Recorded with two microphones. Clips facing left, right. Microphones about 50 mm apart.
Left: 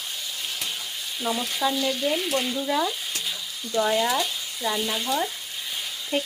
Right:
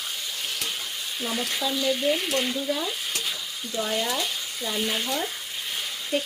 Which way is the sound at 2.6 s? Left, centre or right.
Left.